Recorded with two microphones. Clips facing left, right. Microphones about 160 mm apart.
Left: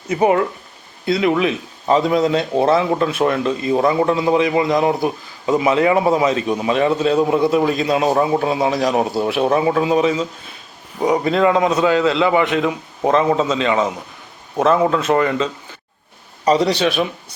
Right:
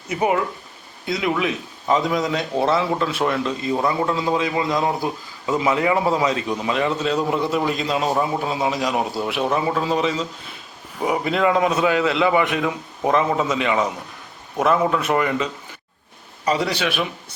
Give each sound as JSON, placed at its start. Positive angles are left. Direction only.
{"t": 0.1, "sound": "a man's voice", "side_deg": 30}
{"t": 11.3, "sound": "a man's voice", "side_deg": 30}
{"t": 16.5, "sound": "a man's voice", "side_deg": 25}